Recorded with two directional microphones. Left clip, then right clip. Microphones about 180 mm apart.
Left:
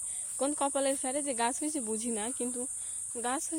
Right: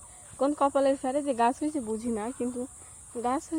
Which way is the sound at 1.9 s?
Centre (ahead or behind).